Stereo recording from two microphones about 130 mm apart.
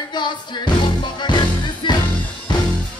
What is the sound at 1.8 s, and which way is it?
Music, 35° left (ahead or behind).